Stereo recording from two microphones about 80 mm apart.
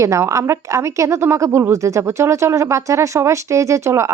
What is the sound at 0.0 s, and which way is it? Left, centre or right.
Speech, right.